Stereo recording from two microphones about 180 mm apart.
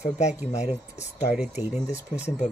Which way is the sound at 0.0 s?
40° left (ahead or behind).